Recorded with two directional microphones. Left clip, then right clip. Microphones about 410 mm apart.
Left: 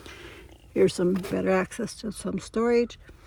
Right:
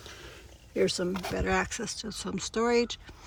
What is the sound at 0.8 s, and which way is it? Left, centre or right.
Speech, centre.